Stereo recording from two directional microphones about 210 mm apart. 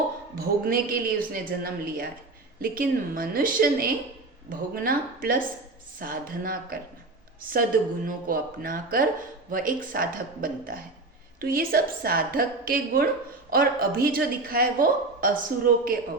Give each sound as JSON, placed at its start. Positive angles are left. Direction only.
{"t": 0.3, "sound": "a woman's voice", "side_deg": -45}
{"t": 8.0, "sound": "a woman's voice", "side_deg": -40}